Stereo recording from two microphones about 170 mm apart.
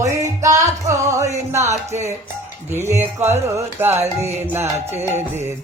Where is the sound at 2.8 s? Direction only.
15° right (ahead or behind).